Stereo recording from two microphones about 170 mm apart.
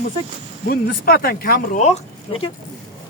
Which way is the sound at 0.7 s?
65° left (ahead or behind).